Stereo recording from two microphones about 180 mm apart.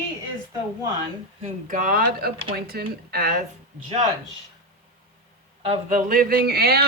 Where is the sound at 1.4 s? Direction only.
45° right (ahead or behind).